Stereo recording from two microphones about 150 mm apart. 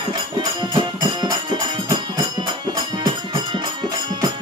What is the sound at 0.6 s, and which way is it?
Music, 35° right (ahead or behind).